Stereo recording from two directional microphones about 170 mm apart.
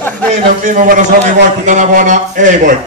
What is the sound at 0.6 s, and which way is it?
A man's voice, 45° right (ahead or behind).